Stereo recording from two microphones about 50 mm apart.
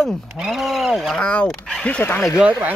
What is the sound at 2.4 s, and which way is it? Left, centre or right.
Speech, centre.